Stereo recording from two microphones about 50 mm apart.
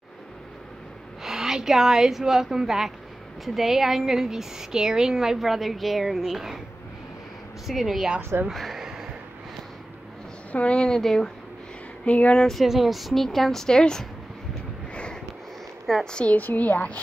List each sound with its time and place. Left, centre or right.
1.2 s a woman's voice: centre
7.6 s a woman's voice: centre
8.2 s speech: right
8.5 s a woman's voice: centre
8.8 s a sound: centre
10.5 s a woman's voice: left
11.0 s speech: centre
12.0 s speech: left
12.6 s a woman's voice: centre
16.1 s a woman's voice: centre
16.3 s a woman's voice: left